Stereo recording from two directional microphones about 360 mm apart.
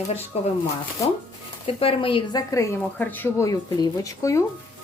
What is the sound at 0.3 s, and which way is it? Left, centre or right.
Speech, centre.